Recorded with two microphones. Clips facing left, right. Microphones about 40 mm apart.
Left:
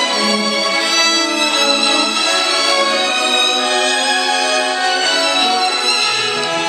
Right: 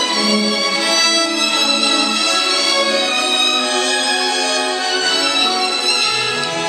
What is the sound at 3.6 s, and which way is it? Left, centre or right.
Music, left.